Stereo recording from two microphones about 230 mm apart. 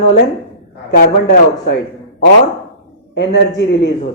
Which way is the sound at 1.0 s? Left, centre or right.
Left.